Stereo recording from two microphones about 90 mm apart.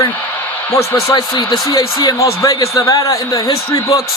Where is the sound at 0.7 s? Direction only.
35° left (ahead or behind).